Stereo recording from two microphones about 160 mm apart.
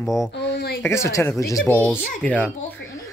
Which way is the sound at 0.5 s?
90° left.